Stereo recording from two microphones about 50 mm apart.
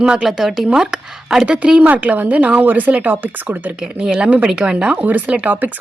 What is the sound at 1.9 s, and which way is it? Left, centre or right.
Speech, right.